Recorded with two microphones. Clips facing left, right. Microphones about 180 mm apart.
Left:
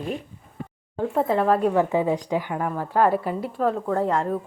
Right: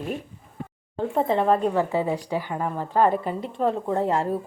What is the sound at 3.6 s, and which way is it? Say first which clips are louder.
Speech: even; 25° right (ahead or behind).